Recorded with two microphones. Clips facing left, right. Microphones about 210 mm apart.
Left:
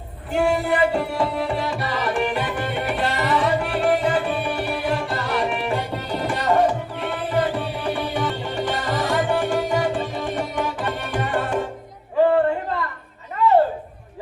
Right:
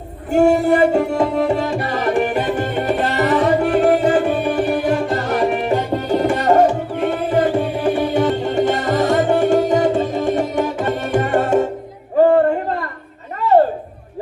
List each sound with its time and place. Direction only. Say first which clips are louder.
0.3 s music: right 7 dB; 45° right (ahead or behind)
4.9 s tabla: right 6 dB; 45° right (ahead or behind)
12.2 s a sound: right 5 dB; 45° right (ahead or behind)